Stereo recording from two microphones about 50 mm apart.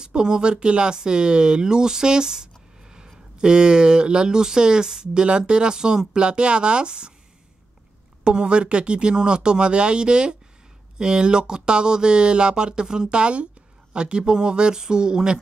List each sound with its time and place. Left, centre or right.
0.0 s speech: centre
8.2 s speech: centre